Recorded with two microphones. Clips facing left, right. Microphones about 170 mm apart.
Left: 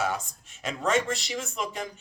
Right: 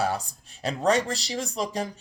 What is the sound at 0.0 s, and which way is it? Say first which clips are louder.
Speech: right 2 dB; 35° right (ahead or behind).